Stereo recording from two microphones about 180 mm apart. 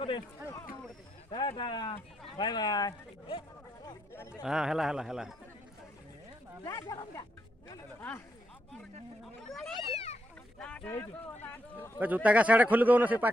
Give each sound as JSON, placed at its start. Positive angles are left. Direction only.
{"t": 1.3, "sound": "speech", "side_deg": 25}
{"t": 3.8, "sound": "chatter", "side_deg": 15}
{"t": 4.4, "sound": "speech", "side_deg": -5}
{"t": 6.7, "sound": "speech", "side_deg": 20}
{"t": 9.5, "sound": "a sound", "side_deg": 0}
{"t": 9.9, "sound": "a sound", "side_deg": 35}
{"t": 10.6, "sound": "speech", "side_deg": 5}
{"t": 11.5, "sound": "a sound", "side_deg": 10}
{"t": 11.9, "sound": "a man's voice", "side_deg": -10}